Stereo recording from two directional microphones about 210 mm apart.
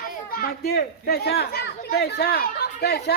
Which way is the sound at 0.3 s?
45° left (ahead or behind).